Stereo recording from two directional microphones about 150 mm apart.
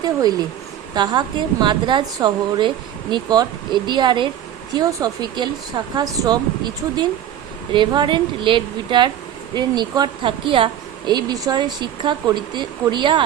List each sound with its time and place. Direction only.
0.0 s a woman's voice: 25° right (ahead or behind)
7.7 s a woman's voice: 30° right (ahead or behind)